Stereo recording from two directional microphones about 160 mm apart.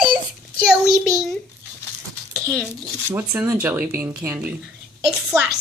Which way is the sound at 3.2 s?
15° right (ahead or behind).